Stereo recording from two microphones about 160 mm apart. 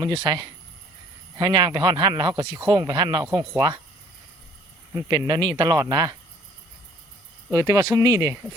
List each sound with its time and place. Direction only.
0.0 s speech: 20° right (ahead or behind)
5.0 s speech: 25° right (ahead or behind)
7.5 s speech: 20° right (ahead or behind)